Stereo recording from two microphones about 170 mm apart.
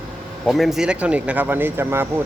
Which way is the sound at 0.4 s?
Centre (ahead or behind).